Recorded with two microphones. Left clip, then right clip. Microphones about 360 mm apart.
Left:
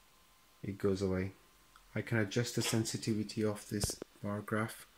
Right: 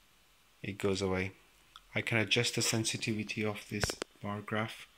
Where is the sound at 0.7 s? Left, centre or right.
Centre.